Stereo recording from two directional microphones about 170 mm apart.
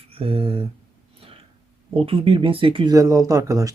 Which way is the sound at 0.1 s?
35° right (ahead or behind).